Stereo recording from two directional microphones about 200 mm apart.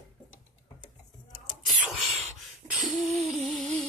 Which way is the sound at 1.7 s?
Centre (ahead or behind).